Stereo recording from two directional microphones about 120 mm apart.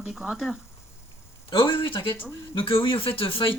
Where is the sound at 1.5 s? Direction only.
45° left (ahead or behind).